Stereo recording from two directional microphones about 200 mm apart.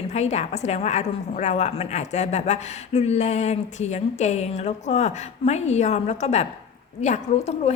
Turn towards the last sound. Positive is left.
turn(degrees=35)  # may be behind; listen again after turning